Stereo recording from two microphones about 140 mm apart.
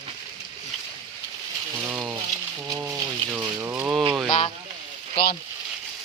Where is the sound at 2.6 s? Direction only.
25° right (ahead or behind).